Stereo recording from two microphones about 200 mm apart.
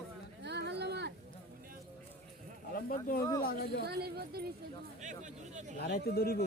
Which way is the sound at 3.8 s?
50° right (ahead or behind).